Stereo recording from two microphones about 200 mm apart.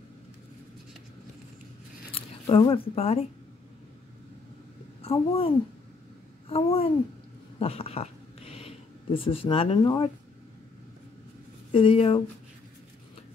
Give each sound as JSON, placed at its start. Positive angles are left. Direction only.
{"t": 2.1, "sound": "speech", "side_deg": 25}
{"t": 5.0, "sound": "a woman's voice", "side_deg": 30}
{"t": 6.5, "sound": "speech", "side_deg": 30}
{"t": 7.5, "sound": "a sound", "side_deg": 30}
{"t": 11.7, "sound": "speech", "side_deg": 25}